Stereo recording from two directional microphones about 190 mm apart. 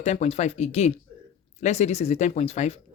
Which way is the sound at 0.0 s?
35° left (ahead or behind).